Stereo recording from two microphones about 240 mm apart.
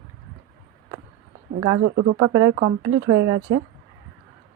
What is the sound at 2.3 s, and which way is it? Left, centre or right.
Speech, right.